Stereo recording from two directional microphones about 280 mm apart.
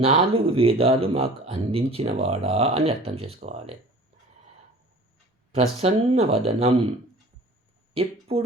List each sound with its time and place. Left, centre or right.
0.0 s speech: right
5.8 s speech: right
7.9 s speech: right